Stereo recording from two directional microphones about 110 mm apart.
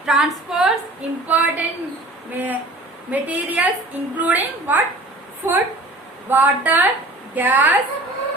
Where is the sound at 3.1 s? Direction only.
15° right (ahead or behind).